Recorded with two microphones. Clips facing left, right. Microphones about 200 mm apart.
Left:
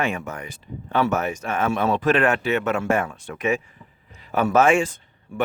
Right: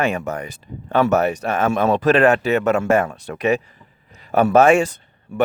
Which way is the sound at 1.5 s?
45° right (ahead or behind).